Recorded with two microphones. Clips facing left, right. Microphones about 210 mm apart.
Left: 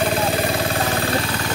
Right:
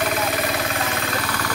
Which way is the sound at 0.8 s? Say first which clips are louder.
Left 4 dB; 35° left (ahead or behind).